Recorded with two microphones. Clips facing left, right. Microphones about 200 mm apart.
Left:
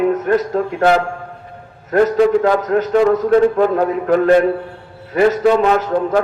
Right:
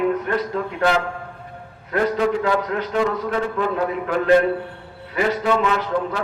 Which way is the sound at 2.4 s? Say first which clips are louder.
Left 7 dB; 45° left (ahead or behind).